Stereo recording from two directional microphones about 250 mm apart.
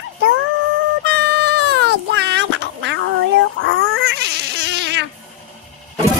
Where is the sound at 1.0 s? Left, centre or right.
Right.